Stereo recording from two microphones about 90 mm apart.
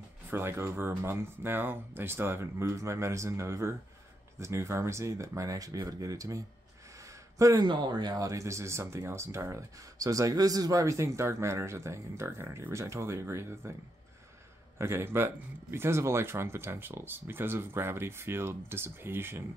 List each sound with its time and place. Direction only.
0.3 s speech: 25° right (ahead or behind)
7.0 s a sound: 35° right (ahead or behind)
7.6 s speech: 55° right (ahead or behind); by 13.7 s 30° right (ahead or behind)
14.8 s speech: 30° right (ahead or behind)